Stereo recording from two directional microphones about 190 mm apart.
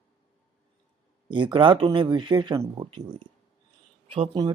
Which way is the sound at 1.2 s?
25° right (ahead or behind).